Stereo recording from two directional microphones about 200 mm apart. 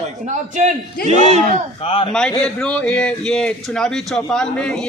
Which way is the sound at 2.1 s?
5° left (ahead or behind).